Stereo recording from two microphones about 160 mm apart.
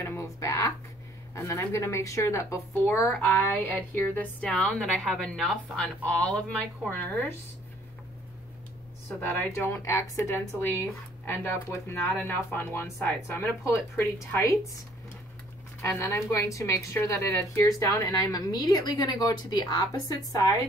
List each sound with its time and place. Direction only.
0.0 s speech: 15° left (ahead or behind)
9.2 s speech: 15° left (ahead or behind)
15.8 s a woman's voice: 15° left (ahead or behind)